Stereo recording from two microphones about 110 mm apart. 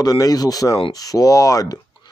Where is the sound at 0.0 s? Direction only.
35° left (ahead or behind).